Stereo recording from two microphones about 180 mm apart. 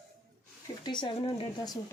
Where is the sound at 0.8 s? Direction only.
25° left (ahead or behind).